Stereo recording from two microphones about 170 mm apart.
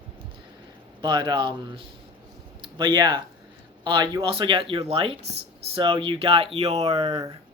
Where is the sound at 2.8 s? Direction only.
25° right (ahead or behind).